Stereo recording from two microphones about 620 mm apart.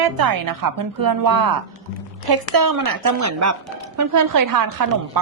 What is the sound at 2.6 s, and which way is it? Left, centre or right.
A woman's voice, right.